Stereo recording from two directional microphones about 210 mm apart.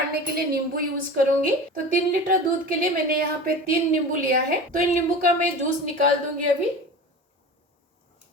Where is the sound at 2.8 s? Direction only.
45° right (ahead or behind).